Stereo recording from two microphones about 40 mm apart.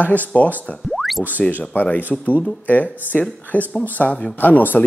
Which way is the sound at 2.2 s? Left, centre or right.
Left.